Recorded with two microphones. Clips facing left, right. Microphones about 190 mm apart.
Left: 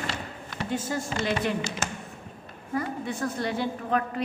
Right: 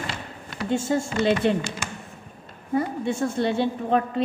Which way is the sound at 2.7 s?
25° right (ahead or behind).